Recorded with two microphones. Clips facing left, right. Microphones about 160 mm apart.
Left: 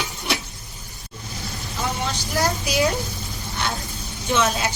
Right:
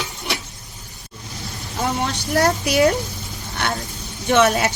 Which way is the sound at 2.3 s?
65° right (ahead or behind).